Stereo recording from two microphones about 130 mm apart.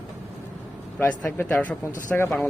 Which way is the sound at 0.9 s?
15° left (ahead or behind).